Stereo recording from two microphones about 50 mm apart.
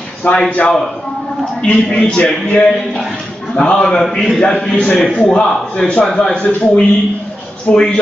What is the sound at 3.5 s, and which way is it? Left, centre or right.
Speech, left.